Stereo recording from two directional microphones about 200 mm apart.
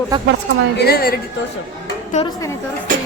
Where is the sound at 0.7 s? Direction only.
50° left (ahead or behind).